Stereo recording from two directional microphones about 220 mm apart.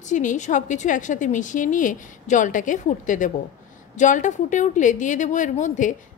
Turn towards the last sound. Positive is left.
turn(degrees=35)  # may be behind; listen again after turning